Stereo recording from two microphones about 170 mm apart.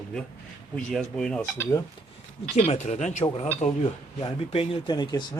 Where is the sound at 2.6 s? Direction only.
40° left (ahead or behind).